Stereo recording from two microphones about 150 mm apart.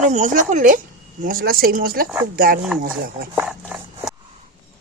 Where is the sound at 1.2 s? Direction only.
75° right (ahead or behind).